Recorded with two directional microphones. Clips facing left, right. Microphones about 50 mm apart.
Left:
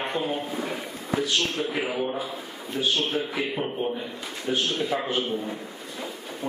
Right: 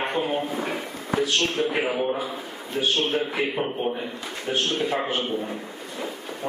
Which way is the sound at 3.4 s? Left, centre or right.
Right.